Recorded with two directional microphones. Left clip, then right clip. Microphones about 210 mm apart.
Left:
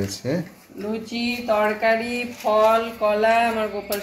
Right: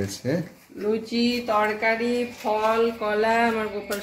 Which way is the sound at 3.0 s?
20° right (ahead or behind).